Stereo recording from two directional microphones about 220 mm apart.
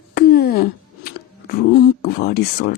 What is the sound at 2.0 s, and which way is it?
Speech, 45° left (ahead or behind).